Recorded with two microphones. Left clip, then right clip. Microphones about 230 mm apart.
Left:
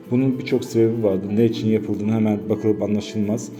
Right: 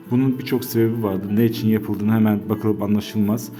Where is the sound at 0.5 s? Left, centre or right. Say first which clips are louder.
Left 3 dB; right.